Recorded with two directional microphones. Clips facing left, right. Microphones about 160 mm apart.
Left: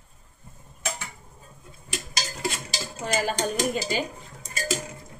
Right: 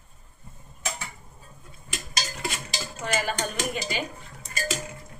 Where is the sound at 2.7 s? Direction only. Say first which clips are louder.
Right 1 dB; 40° left (ahead or behind).